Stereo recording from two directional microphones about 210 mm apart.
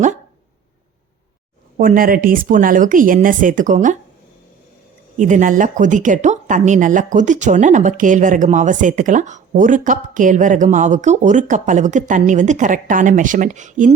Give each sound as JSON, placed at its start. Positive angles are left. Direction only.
{"t": 1.8, "sound": "speech", "side_deg": -40}
{"t": 5.1, "sound": "speech", "side_deg": -35}